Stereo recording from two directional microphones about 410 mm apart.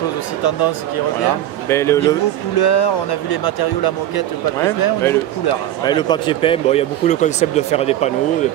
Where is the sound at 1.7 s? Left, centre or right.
Centre.